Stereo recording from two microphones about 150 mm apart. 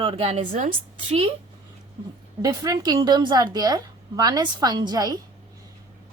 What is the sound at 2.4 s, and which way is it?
A woman's voice, 25° right (ahead or behind).